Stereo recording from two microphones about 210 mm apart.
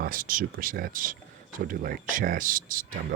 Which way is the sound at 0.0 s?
40° right (ahead or behind).